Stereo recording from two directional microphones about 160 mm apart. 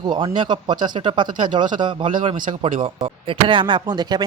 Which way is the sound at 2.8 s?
30° right (ahead or behind).